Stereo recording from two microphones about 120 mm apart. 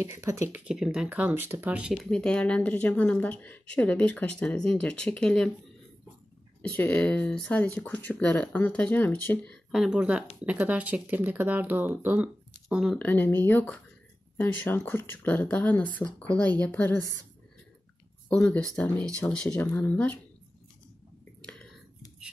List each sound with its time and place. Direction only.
0.0 s speech: 25° right (ahead or behind)
0.7 s speech: 5° right (ahead or behind)
2.0 s speech: 5° left (ahead or behind)
6.6 s speech: 15° left (ahead or behind)
9.7 s speech: 5° right (ahead or behind)
12.6 s speech: centre (ahead or behind)
13.0 s speech: 15° left (ahead or behind)
18.3 s speech: 5° left (ahead or behind)
21.5 s whispering: 10° left (ahead or behind)